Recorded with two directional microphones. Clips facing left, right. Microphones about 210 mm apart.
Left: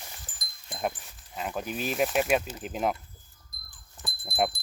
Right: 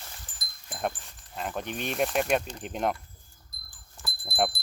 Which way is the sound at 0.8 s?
5° left (ahead or behind).